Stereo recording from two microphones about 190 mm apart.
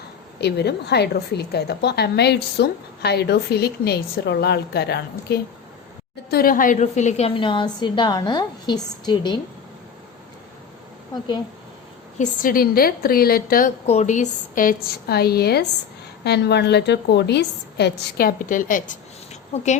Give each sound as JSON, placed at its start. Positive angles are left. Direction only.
{"t": 0.3, "sound": "a woman's voice", "side_deg": 60}
{"t": 6.3, "sound": "a woman's voice", "side_deg": 50}
{"t": 12.2, "sound": "a woman's voice", "side_deg": 45}
{"t": 13.8, "sound": "a woman's voice", "side_deg": 35}